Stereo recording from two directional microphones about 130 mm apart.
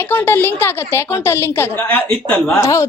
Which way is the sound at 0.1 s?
15° left (ahead or behind).